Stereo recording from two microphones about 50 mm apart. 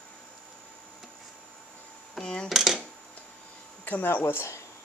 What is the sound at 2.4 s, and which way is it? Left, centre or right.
Speech, centre.